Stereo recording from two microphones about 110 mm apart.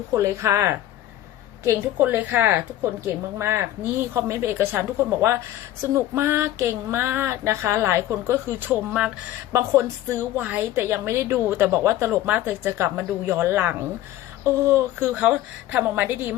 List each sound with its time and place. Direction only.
0.1 s a woman's voice: 25° right (ahead or behind); by 9.1 s 10° right (ahead or behind)
9.5 s a woman's voice: 25° right (ahead or behind)